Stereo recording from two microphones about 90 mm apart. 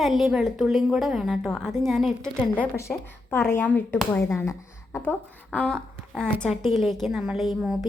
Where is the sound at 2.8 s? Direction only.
30° left (ahead or behind).